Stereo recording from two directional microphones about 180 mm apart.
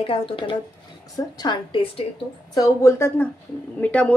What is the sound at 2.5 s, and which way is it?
A woman's voice, 20° left (ahead or behind).